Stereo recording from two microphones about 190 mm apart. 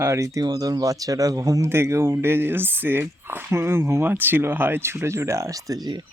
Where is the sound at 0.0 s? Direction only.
15° right (ahead or behind).